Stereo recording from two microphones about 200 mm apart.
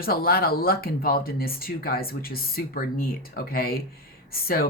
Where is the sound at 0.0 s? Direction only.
50° left (ahead or behind).